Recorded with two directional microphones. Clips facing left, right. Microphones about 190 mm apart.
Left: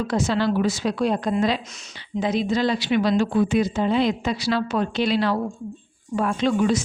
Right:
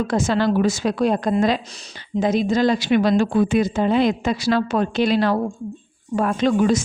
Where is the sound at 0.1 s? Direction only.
50° right (ahead or behind).